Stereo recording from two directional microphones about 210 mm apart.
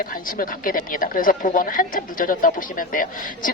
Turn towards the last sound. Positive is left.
turn(degrees=40)  # may be behind; listen again after turning